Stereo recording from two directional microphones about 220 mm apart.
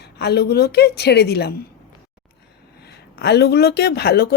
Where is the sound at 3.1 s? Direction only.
50° left (ahead or behind).